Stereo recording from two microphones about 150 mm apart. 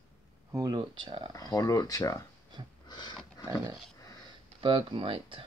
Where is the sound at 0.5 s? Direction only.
30° right (ahead or behind).